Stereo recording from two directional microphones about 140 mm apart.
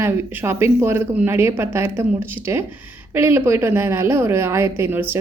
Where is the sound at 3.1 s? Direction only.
15° right (ahead or behind).